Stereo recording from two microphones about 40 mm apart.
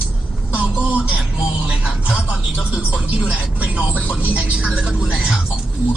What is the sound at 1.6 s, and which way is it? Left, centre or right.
Music, right.